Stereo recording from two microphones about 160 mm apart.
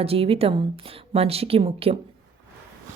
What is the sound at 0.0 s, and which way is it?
Speech, 35° right (ahead or behind).